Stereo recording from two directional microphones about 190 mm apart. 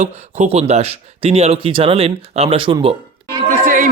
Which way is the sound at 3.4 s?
45° right (ahead or behind).